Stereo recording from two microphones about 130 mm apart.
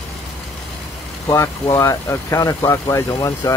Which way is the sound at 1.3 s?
20° left (ahead or behind).